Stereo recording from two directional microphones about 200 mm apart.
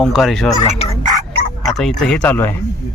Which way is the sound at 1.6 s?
Centre (ahead or behind).